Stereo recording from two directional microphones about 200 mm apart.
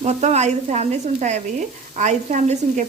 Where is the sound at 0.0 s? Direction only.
35° right (ahead or behind).